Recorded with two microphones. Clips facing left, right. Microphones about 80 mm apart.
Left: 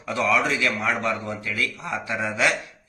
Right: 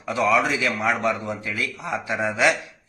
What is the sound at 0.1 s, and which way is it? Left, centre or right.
A man's voice, centre.